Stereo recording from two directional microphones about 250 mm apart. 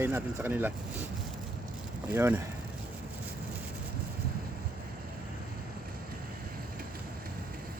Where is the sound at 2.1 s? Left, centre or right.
Centre.